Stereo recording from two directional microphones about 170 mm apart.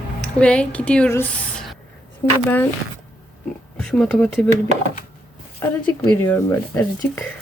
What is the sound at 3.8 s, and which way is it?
Speech, 5° left (ahead or behind).